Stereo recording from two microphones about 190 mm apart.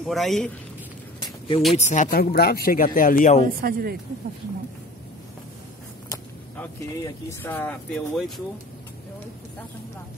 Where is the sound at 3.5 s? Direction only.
50° right (ahead or behind).